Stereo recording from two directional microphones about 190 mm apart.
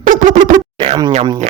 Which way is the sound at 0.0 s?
45° right (ahead or behind).